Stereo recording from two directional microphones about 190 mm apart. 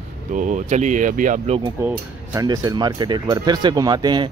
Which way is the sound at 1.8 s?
15° right (ahead or behind).